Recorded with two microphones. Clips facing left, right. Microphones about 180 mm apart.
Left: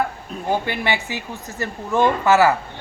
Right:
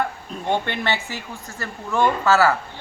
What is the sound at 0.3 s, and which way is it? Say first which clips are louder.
Speech: left 1 dB; 5° left (ahead or behind).